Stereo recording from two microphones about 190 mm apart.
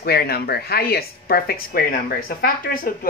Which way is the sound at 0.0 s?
55° left (ahead or behind).